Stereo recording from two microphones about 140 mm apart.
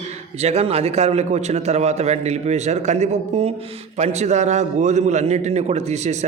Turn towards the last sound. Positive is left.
turn(degrees=-55)  # may be behind; listen again after turning